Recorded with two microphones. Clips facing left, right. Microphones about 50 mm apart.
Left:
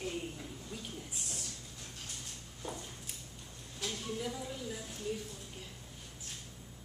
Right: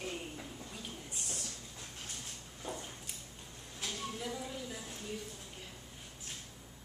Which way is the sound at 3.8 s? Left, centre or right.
Centre.